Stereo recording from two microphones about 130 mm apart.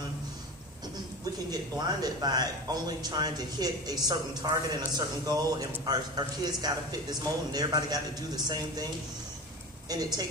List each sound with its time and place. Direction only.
1.5 s speech: 30° right (ahead or behind)
9.9 s a woman's voice: 30° right (ahead or behind)